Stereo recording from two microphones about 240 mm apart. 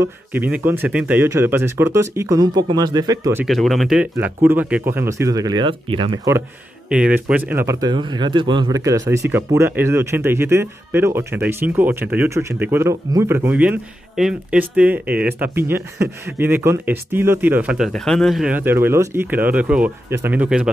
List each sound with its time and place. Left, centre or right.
0.0 s speech: centre
3.4 s speech: centre; by 6.1 s right
6.9 s speech: centre